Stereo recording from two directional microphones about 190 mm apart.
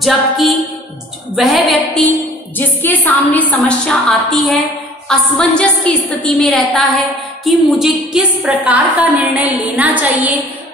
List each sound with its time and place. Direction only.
0.0 s a woman's voice: centre (ahead or behind)